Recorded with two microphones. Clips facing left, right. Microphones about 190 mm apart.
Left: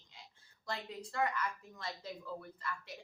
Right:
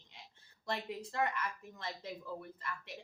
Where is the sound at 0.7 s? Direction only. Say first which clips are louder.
Right 3 dB; 25° right (ahead or behind).